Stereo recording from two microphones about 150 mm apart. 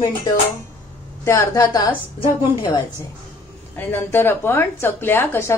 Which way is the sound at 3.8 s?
15° left (ahead or behind).